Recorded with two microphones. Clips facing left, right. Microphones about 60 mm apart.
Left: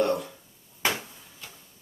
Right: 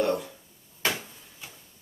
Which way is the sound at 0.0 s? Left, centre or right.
Centre.